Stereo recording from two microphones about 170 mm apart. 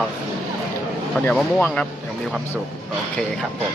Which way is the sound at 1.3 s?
10° left (ahead or behind).